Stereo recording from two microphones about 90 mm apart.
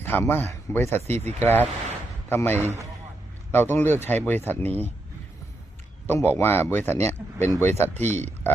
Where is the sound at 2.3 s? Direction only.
25° left (ahead or behind).